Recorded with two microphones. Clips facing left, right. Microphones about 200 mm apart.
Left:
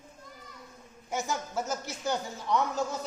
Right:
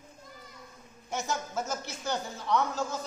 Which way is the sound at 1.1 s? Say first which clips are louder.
Left 1 dB; 10° left (ahead or behind).